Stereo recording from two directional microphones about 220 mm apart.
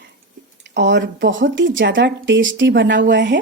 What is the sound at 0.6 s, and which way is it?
Speech, 55° right (ahead or behind).